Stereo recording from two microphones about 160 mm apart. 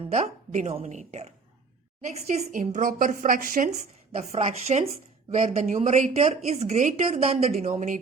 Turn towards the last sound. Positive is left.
turn(degrees=-50)  # may be behind; listen again after turning